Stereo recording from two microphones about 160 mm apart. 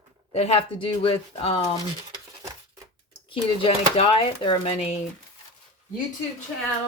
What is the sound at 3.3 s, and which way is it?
Speech, 35° left (ahead or behind).